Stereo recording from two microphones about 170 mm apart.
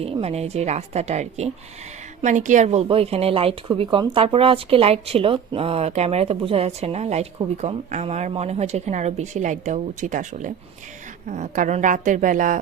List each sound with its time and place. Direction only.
0.0 s speech: 35° right (ahead or behind)